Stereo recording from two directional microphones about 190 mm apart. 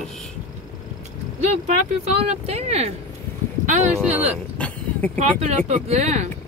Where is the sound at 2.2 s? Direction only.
35° right (ahead or behind).